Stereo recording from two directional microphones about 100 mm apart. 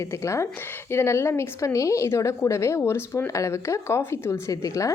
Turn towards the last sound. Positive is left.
turn(degrees=30)  # may be behind; listen again after turning